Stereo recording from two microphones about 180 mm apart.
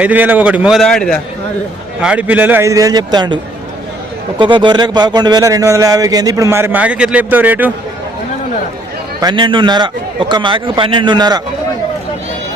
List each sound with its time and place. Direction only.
0.0 s a man's voice: 10° right (ahead or behind)
2.0 s a man's voice: 5° right (ahead or behind); by 3.3 s 25° right (ahead or behind)
4.4 s speech: 25° right (ahead or behind); by 7.7 s 10° right (ahead or behind)
9.2 s speech: 25° right (ahead or behind)